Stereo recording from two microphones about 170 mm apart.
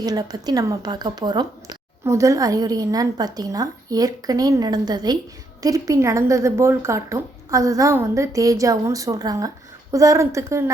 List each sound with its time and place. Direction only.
0.0 s a woman's voice: 20° right (ahead or behind)